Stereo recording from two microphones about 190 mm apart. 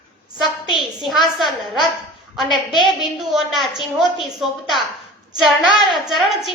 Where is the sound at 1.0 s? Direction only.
Centre (ahead or behind).